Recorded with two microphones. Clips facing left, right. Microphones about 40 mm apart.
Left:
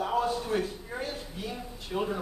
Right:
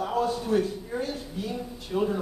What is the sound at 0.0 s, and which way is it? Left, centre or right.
A man's voice, centre.